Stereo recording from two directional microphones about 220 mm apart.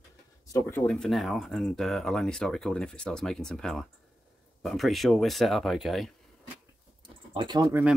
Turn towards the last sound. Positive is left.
turn(degrees=-15)  # may be behind; listen again after turning